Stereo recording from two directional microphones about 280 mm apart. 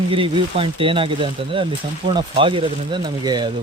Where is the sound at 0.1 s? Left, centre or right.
Centre.